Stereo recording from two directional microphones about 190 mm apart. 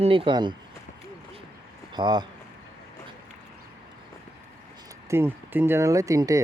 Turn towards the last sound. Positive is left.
turn(degrees=-15)  # may be behind; listen again after turning